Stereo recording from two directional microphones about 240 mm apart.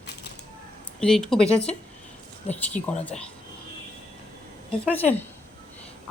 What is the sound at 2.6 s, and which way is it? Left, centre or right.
Speech, centre.